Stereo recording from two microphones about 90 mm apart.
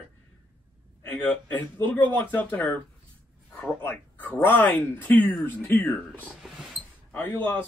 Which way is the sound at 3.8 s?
20° left (ahead or behind).